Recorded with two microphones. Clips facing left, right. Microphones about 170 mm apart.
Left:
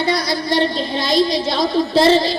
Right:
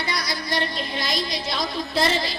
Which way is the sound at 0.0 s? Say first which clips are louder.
Left 10 dB; 30° left (ahead or behind).